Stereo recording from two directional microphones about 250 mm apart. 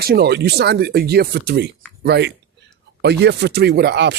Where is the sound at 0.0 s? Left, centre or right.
Right.